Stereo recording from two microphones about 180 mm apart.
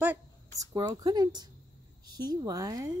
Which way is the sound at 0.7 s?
20° right (ahead or behind).